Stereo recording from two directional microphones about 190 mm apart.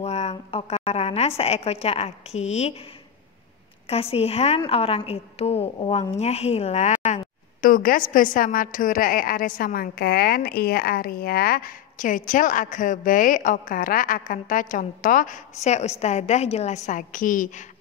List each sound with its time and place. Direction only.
0.0 s a woman's voice: 35° left (ahead or behind)
3.9 s a woman's voice: 30° left (ahead or behind)